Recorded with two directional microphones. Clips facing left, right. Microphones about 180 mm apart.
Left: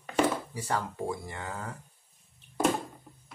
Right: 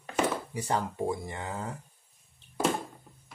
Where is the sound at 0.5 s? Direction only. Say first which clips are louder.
Right 2 dB; 20° right (ahead or behind).